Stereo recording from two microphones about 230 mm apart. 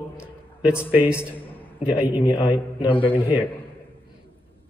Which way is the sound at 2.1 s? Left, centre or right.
Centre.